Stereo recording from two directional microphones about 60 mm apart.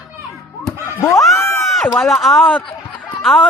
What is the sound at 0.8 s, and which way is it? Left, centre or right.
Snicker, left.